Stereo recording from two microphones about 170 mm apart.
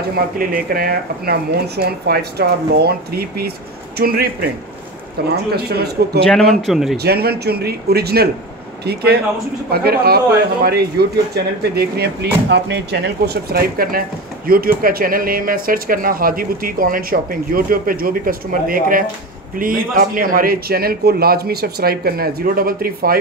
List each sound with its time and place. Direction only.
0.1 s a man's voice: 60° right (ahead or behind)
6.6 s speech: centre (ahead or behind)
7.0 s a man's voice: 70° right (ahead or behind)